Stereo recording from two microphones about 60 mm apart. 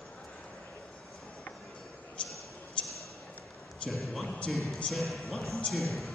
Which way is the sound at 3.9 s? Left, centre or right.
Centre.